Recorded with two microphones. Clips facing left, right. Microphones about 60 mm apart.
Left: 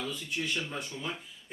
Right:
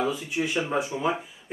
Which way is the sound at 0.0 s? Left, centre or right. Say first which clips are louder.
Right 8 dB; centre.